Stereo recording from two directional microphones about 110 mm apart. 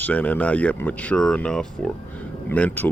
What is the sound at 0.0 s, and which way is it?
Speech, 15° left (ahead or behind).